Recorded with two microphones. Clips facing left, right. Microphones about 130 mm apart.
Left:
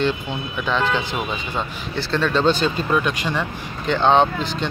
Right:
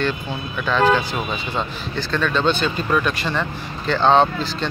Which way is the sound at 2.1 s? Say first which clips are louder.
Left 2 dB; 30° left (ahead or behind).